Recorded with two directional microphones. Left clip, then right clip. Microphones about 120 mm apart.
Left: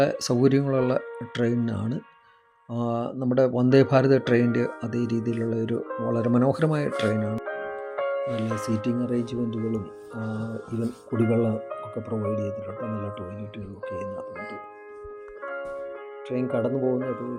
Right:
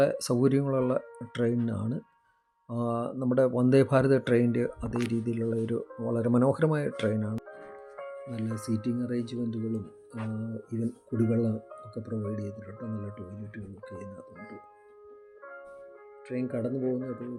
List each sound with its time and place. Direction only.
0.0 s speech: centre (ahead or behind)
7.4 s music: 60° left (ahead or behind)
8.6 s speech: 20° left (ahead or behind)
9.1 s speech: 5° left (ahead or behind)
11.1 s speech: 40° left (ahead or behind)
12.4 s speech: 10° left (ahead or behind)
12.8 s speech: 35° left (ahead or behind)
15.4 s music: 50° left (ahead or behind)
16.3 s speech: 5° left (ahead or behind)
16.7 s speech: 50° left (ahead or behind)